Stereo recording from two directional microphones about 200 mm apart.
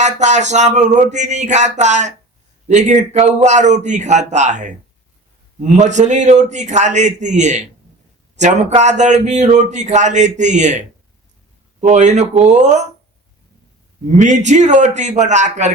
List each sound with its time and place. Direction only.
0.0 s speech: 35° right (ahead or behind)
14.2 s speech: 35° right (ahead or behind)